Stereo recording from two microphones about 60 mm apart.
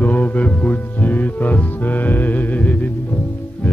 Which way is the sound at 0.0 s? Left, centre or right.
Left.